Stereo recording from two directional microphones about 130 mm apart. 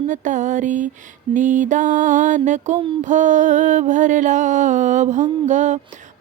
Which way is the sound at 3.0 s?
70° right (ahead or behind).